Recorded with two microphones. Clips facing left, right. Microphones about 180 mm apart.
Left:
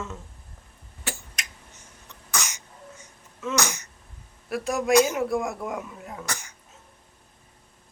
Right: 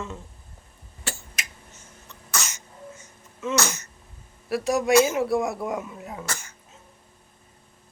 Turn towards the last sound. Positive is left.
turn(degrees=15)  # may be behind; listen again after turning